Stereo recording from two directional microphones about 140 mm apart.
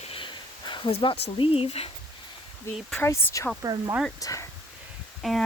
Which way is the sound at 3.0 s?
20° left (ahead or behind).